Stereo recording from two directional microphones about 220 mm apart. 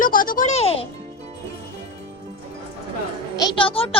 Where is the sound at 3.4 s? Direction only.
20° left (ahead or behind).